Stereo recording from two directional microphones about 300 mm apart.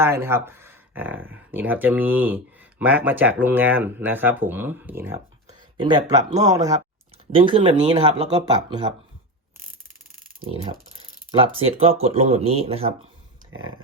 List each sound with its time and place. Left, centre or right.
0.0 s speech: centre
6.5 s speech: centre
11.3 s speech: centre
13.5 s a sound: right